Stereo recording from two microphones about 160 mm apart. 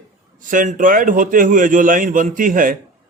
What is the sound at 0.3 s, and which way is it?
A man's voice, 55° right (ahead or behind).